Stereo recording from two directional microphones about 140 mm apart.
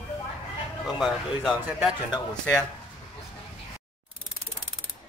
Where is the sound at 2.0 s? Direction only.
25° left (ahead or behind).